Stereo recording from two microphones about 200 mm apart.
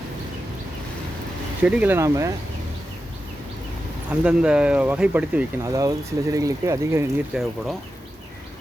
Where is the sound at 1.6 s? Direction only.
5° right (ahead or behind).